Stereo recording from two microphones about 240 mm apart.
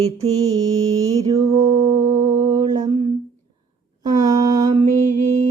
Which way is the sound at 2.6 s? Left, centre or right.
Right.